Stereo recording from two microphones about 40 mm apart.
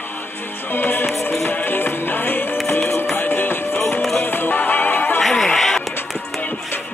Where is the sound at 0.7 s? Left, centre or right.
Left.